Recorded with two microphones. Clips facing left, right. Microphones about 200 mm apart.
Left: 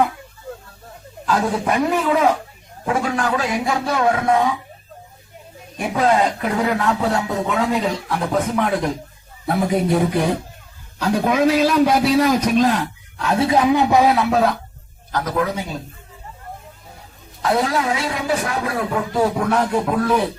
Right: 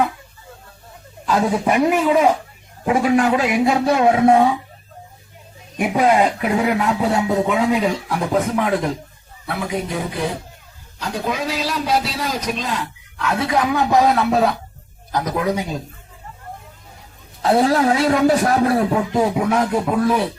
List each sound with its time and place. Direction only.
1.6 s a man's voice: 10° right (ahead or behind); by 4.5 s 30° right (ahead or behind)
5.7 s speech: 15° right (ahead or behind)
9.5 s speech: 40° left (ahead or behind)
11.0 s a man's voice: 55° left (ahead or behind)
13.1 s speech: 30° left (ahead or behind)
13.9 s speech: centre (ahead or behind)
15.1 s speech: 10° right (ahead or behind)
17.4 s a man's voice: 30° right (ahead or behind)
19.1 s speech: 10° right (ahead or behind)